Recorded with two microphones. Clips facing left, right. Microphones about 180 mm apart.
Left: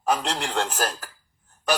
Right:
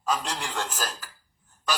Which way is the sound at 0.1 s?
60° left (ahead or behind).